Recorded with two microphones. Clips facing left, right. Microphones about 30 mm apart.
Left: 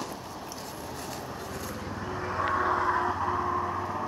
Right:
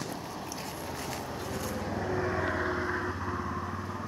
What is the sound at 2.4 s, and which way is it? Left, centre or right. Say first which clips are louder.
Vehicle: left 5 dB; left.